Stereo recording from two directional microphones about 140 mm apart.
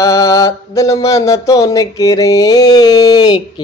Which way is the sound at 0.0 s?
25° left (ahead or behind).